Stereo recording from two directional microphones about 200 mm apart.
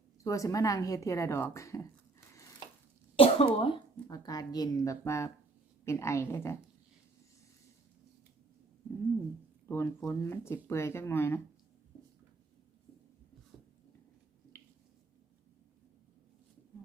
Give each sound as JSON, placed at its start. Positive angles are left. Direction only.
{"t": 0.3, "sound": "speech", "side_deg": 15}
{"t": 3.2, "sound": "speech", "side_deg": 30}
{"t": 9.6, "sound": "speech", "side_deg": 10}